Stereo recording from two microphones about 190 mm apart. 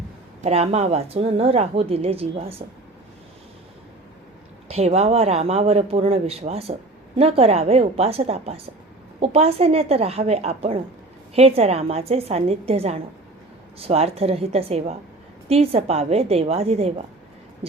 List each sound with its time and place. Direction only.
0.4 s a woman's voice: 30° right (ahead or behind)
4.7 s a woman's voice: 35° right (ahead or behind)